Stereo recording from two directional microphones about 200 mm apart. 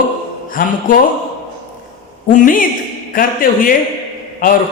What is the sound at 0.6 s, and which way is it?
Speech, 45° left (ahead or behind).